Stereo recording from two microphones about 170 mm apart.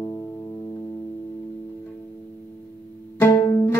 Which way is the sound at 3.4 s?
20° left (ahead or behind).